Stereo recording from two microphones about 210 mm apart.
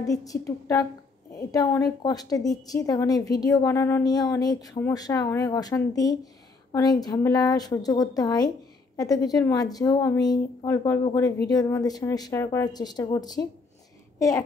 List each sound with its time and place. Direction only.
0.0 s a woman's voice: 15° left (ahead or behind)